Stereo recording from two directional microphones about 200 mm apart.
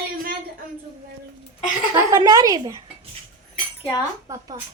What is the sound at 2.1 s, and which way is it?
Speech, 15° right (ahead or behind).